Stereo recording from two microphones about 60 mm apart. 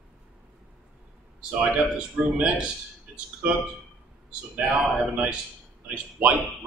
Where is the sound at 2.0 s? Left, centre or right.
Right.